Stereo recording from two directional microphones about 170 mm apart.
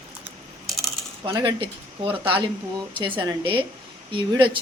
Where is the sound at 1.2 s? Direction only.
30° right (ahead or behind).